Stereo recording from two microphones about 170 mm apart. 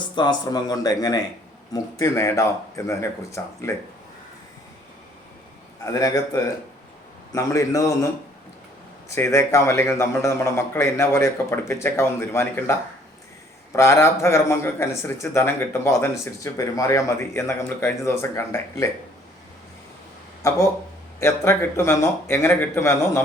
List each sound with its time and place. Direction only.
0.2 s speech: 25° left (ahead or behind)
5.8 s speech: 20° left (ahead or behind)
13.7 s speech: 15° left (ahead or behind)
20.4 s speech: 15° left (ahead or behind)